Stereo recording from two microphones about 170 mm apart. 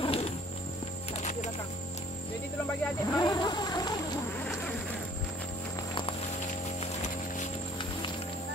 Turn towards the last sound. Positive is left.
turn(degrees=45)  # may be behind; listen again after turning